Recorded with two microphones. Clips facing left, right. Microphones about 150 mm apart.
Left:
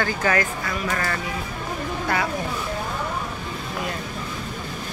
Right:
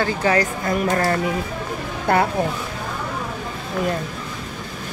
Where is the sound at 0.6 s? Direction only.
45° right (ahead or behind).